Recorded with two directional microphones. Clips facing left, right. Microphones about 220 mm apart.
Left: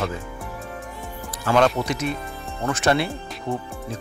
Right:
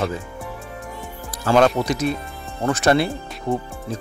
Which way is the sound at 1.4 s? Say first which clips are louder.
Right 3 dB; 40° right (ahead or behind).